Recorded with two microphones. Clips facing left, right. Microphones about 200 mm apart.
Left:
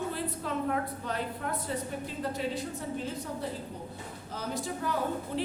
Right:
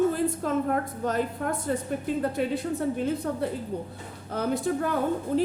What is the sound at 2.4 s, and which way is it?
A woman's voice, 60° right (ahead or behind).